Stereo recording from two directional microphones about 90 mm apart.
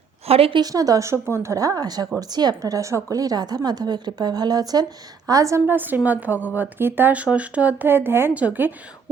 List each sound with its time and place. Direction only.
0.3 s a woman's voice: 90° right
0.6 s a woman's voice: 40° right (ahead or behind)
5.3 s speech: 35° right (ahead or behind)
5.6 s speech: 20° right (ahead or behind)
8.3 s speech: 15° right (ahead or behind)